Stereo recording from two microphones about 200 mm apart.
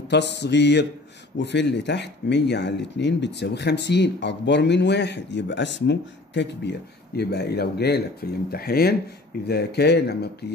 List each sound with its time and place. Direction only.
0.1 s speech: 60° left (ahead or behind)